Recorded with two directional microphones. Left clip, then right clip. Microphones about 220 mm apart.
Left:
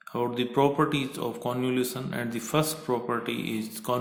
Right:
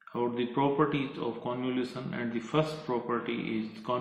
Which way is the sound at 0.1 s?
55° left (ahead or behind).